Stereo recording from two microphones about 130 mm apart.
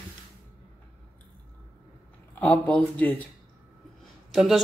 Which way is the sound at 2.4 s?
10° left (ahead or behind).